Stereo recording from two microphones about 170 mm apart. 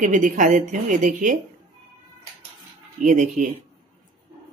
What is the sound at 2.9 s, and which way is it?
Speech, 50° right (ahead or behind).